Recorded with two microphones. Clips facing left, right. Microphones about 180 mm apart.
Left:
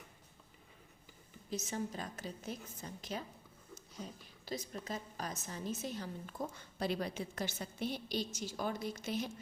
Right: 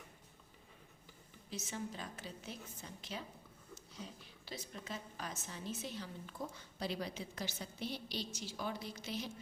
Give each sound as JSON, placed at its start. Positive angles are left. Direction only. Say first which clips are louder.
{"t": 1.5, "sound": "a woman's voice", "louder": "left 4 dB", "side_deg": 45}